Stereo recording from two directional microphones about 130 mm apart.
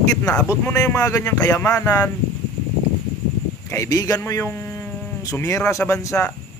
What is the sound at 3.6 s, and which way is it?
A man's voice, 25° left (ahead or behind).